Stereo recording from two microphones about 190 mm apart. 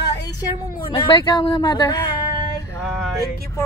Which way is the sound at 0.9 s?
25° left (ahead or behind).